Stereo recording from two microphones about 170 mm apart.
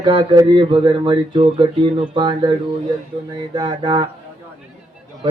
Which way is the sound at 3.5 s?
25° right (ahead or behind).